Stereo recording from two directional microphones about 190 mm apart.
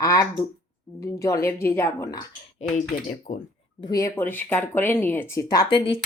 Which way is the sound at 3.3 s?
45° left (ahead or behind).